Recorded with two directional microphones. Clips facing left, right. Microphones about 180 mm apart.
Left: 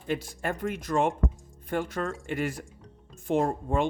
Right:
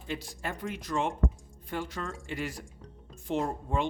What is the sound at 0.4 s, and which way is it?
A man's voice, 50° left (ahead or behind).